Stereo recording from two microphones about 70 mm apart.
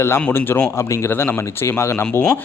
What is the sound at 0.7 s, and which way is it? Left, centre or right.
Speech, left.